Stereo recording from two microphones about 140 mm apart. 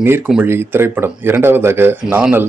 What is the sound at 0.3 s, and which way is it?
Speech, 15° right (ahead or behind).